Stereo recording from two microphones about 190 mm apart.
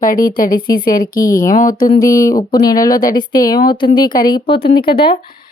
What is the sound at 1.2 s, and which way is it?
Speech, 15° left (ahead or behind).